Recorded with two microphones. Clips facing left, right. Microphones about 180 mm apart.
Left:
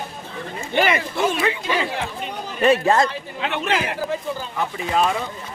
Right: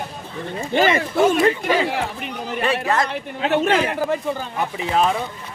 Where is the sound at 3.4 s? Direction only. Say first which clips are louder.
Right 5 dB; 40° right (ahead or behind).